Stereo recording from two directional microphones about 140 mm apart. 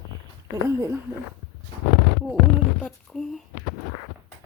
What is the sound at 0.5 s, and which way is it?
Speech, 20° right (ahead or behind).